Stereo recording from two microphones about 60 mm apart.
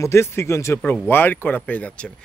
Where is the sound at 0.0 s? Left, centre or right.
Left.